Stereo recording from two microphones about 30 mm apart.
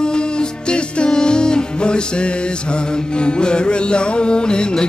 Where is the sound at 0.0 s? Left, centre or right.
Left.